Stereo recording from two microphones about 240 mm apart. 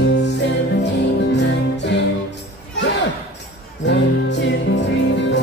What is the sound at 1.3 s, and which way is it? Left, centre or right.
Music, left.